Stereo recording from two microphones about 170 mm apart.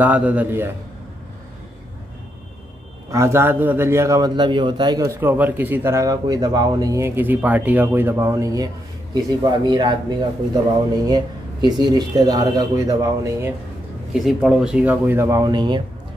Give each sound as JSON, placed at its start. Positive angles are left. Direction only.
{"t": 0.0, "sound": "a man's voice", "side_deg": -10}
{"t": 3.1, "sound": "a man's voice", "side_deg": -15}
{"t": 14.1, "sound": "a man's voice", "side_deg": 0}